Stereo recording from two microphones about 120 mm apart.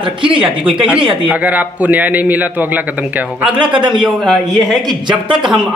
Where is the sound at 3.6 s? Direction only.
45° right (ahead or behind).